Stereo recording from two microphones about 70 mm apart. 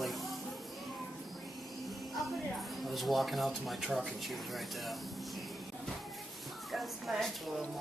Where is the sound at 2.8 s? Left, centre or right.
Centre.